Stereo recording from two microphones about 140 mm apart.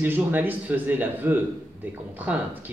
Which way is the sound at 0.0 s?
15° right (ahead or behind).